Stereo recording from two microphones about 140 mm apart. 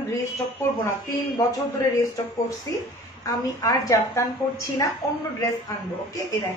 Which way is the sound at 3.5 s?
25° left (ahead or behind).